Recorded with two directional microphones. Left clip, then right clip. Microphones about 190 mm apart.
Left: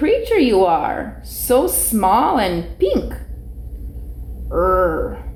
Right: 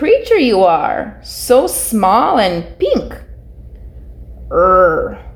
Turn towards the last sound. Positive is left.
turn(degrees=-45)  # may be behind; listen again after turning